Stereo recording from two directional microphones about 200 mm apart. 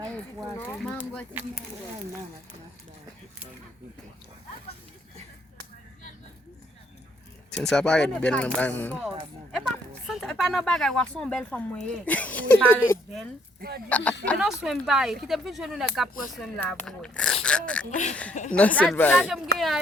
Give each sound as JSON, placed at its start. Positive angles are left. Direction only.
{"t": 0.5, "sound": "speech", "side_deg": 10}
{"t": 7.5, "sound": "speech", "side_deg": 5}
{"t": 13.6, "sound": "speech", "side_deg": -50}
{"t": 13.9, "sound": "speech", "side_deg": 5}
{"t": 17.9, "sound": "speech", "side_deg": 35}
{"t": 18.5, "sound": "speech", "side_deg": 5}